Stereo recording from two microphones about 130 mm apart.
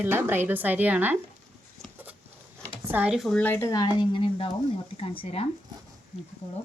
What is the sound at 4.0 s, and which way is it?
Speech, 40° left (ahead or behind).